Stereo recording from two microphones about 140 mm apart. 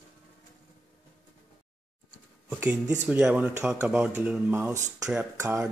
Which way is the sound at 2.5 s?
10° right (ahead or behind).